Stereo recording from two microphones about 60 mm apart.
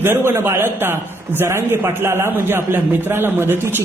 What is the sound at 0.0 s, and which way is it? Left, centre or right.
A man's voice, right.